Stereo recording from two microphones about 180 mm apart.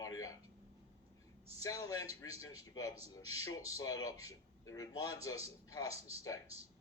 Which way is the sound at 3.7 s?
20° left (ahead or behind).